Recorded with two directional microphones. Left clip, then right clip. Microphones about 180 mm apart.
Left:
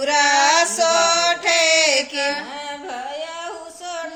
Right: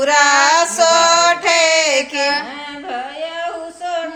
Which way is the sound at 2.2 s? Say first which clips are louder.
Right 5 dB; 15° left (ahead or behind).